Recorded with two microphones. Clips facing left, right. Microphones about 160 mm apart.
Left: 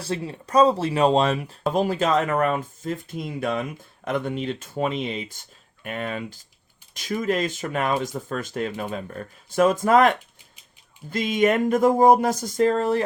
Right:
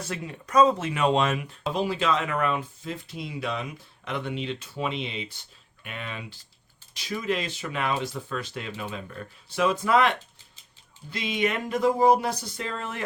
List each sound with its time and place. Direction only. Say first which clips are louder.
0.0 s speech: left 5 dB; 30° left (ahead or behind)